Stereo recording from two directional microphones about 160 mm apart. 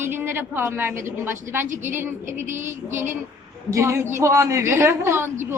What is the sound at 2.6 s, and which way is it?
Speech, 15° right (ahead or behind).